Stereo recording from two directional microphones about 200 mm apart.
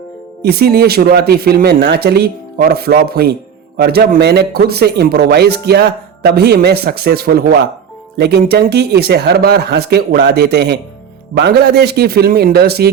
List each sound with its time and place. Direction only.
0.4 s speech: 50° right (ahead or behind)